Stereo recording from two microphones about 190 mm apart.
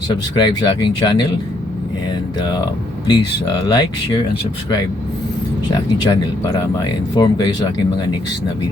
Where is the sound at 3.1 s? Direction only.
20° left (ahead or behind).